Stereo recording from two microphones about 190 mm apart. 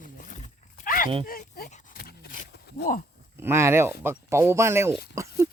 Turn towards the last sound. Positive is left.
turn(degrees=-15)  # may be behind; listen again after turning